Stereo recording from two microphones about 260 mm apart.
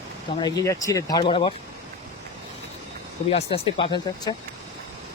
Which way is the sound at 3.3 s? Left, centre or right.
Left.